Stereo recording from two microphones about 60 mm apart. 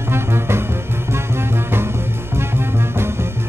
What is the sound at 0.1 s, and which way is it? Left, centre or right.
Music, right.